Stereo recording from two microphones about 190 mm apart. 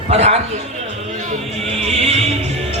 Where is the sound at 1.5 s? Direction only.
35° right (ahead or behind).